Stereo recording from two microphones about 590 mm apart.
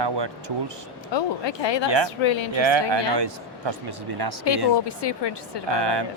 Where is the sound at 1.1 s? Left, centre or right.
Left.